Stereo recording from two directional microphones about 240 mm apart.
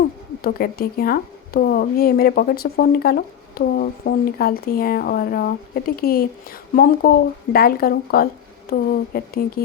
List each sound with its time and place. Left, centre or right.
0.0 s a woman's voice: left